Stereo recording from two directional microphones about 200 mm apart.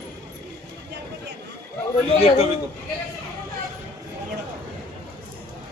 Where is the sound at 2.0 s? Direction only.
30° left (ahead or behind).